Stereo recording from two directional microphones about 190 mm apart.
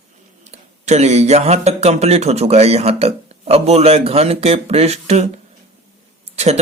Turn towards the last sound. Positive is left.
turn(degrees=-35)  # may be behind; listen again after turning